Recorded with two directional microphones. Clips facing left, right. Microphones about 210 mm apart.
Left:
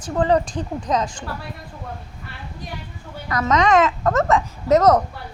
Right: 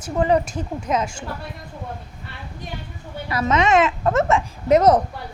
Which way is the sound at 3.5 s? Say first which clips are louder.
Left 1 dB; 25° right (ahead or behind).